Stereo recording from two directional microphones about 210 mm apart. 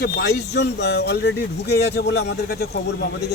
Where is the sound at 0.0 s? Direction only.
50° left (ahead or behind).